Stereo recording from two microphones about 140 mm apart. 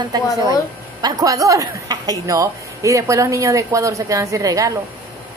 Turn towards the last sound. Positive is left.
turn(degrees=-25)  # may be behind; listen again after turning